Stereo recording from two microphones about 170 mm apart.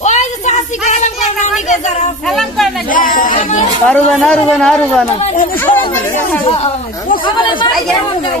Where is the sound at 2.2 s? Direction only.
Centre (ahead or behind).